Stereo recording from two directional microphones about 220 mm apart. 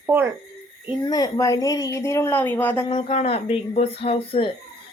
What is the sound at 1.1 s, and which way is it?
Speech, 15° left (ahead or behind).